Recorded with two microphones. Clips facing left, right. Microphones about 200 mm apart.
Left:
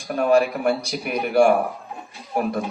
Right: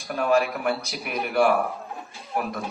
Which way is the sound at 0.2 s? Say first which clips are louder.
Left 4 dB; 35° left (ahead or behind).